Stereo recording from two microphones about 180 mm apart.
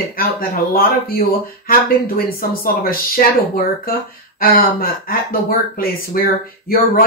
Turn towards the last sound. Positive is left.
turn(degrees=55)  # may be behind; listen again after turning